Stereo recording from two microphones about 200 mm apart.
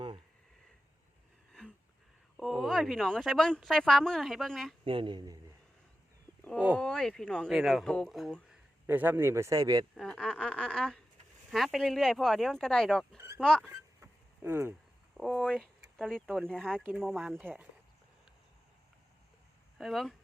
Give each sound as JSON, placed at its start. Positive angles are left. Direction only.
{"t": 1.6, "sound": "wheeze", "side_deg": 5}
{"t": 2.4, "sound": "a woman's voice", "side_deg": 0}
{"t": 4.9, "sound": "speech", "side_deg": -25}
{"t": 6.7, "sound": "a woman's voice", "side_deg": 0}
{"t": 8.9, "sound": "speech", "side_deg": -10}
{"t": 9.9, "sound": "a woman's voice", "side_deg": 5}
{"t": 13.1, "sound": "speech", "side_deg": -15}
{"t": 13.4, "sound": "a woman's voice", "side_deg": 5}
{"t": 13.7, "sound": "a sound", "side_deg": -15}
{"t": 15.2, "sound": "a woman's voice", "side_deg": 5}
{"t": 19.8, "sound": "a woman's voice", "side_deg": 0}